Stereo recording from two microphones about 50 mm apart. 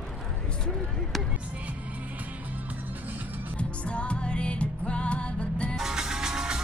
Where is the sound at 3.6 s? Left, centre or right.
Left.